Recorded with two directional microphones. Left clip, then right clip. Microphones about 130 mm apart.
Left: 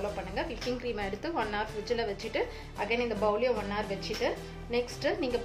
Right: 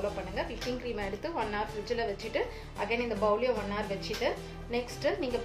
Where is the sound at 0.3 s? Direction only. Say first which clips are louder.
Left 1 dB; 25° left (ahead or behind).